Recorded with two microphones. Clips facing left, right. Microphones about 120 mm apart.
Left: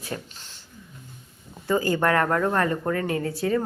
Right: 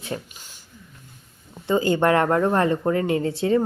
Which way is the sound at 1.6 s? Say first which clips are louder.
Right 3 dB; 25° right (ahead or behind).